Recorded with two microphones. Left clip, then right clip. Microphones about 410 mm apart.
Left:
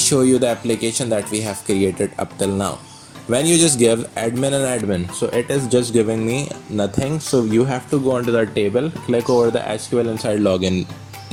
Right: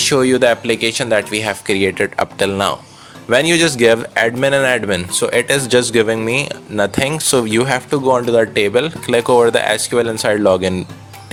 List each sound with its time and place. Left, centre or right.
0.0 s speech: centre
3.2 s speech: centre
9.2 s speech: right
9.6 s speech: right